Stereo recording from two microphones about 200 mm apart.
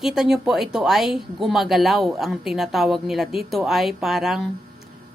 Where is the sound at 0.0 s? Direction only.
Centre (ahead or behind).